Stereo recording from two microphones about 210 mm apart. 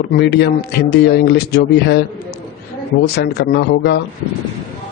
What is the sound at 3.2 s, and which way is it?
Speech, 50° left (ahead or behind).